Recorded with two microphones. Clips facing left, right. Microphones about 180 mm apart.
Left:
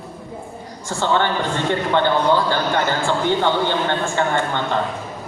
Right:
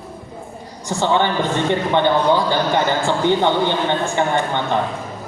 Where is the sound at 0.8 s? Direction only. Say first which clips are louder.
Right 2 dB; 15° right (ahead or behind).